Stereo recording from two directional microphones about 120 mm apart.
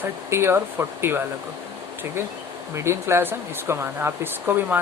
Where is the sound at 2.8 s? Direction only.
20° right (ahead or behind).